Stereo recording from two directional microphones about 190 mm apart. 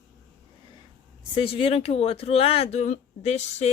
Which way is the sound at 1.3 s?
30° left (ahead or behind).